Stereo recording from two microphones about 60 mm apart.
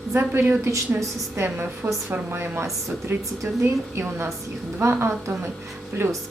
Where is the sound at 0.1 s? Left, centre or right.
Right.